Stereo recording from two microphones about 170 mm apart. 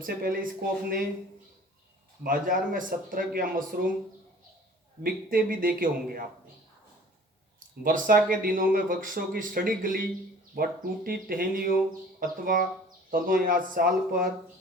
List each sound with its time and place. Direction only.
0.0 s speech: 60° right (ahead or behind)
2.2 s speech: 55° right (ahead or behind)
5.0 s speech: 55° right (ahead or behind)
7.9 s speech: 55° right (ahead or behind)